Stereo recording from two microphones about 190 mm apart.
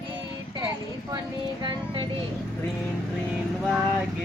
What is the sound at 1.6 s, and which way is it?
Speech, 25° right (ahead or behind).